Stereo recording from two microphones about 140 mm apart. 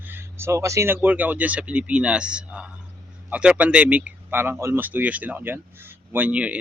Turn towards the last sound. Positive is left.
turn(degrees=-10)  # may be behind; listen again after turning